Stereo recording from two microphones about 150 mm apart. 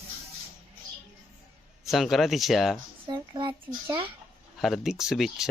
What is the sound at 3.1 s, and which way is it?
Speech, 30° right (ahead or behind).